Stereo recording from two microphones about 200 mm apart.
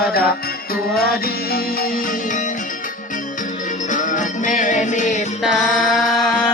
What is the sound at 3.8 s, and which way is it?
Music, 40° left (ahead or behind).